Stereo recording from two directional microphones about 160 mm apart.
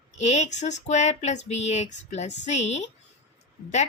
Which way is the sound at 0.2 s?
45° left (ahead or behind).